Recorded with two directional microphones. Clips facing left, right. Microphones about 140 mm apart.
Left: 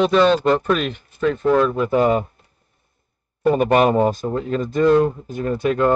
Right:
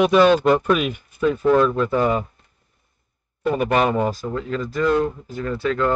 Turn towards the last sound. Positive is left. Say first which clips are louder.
# left 3 dB
turn(degrees=20)  # may be behind; listen again after turning